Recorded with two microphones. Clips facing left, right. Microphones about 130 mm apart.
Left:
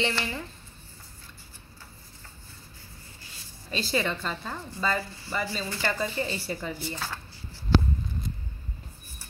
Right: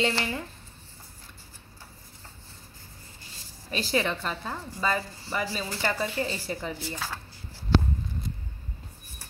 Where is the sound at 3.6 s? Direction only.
10° right (ahead or behind).